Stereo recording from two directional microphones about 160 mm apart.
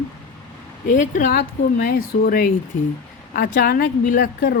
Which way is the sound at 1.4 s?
70° left (ahead or behind).